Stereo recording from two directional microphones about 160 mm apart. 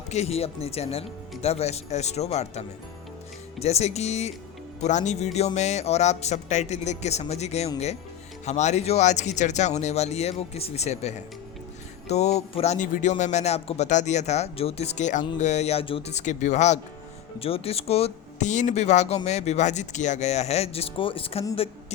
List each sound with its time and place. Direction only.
0.1 s a woman's voice: 40° left (ahead or behind)